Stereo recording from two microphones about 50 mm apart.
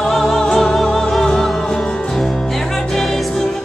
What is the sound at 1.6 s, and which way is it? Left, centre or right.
Music, centre.